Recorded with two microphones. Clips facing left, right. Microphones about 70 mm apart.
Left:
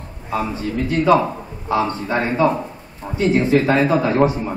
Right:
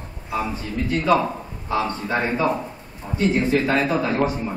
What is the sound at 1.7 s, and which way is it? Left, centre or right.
Speech, left.